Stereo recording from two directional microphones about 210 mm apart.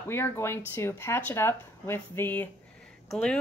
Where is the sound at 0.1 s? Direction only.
10° left (ahead or behind).